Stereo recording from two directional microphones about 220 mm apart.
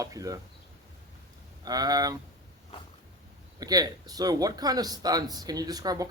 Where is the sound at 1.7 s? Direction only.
15° right (ahead or behind).